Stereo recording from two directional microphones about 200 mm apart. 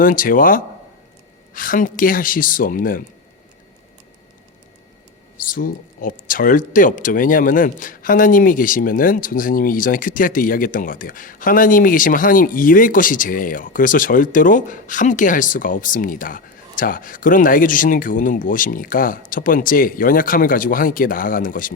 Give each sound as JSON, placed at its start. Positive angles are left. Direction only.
{"t": 0.0, "sound": "speech", "side_deg": 45}
{"t": 5.4, "sound": "speech", "side_deg": 45}